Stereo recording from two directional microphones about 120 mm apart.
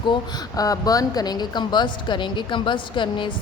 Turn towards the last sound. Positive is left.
turn(degrees=45)  # may be behind; listen again after turning